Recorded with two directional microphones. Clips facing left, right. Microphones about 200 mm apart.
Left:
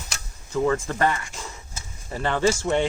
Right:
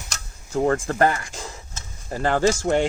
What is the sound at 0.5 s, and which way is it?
Speech, 45° right (ahead or behind).